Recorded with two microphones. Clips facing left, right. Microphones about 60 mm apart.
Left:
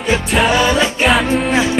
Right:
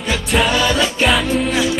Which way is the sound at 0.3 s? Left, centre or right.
Centre.